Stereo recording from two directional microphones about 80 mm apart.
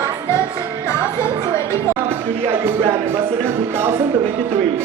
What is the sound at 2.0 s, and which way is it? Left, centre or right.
Music, right.